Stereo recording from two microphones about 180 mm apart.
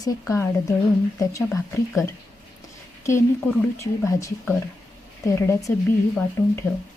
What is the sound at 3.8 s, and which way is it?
Speech, 15° left (ahead or behind).